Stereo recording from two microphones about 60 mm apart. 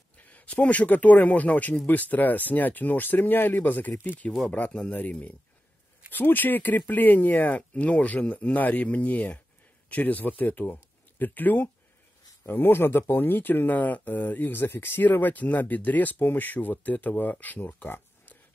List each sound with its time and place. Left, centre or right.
0.2 s speech: left
4.5 s speech: left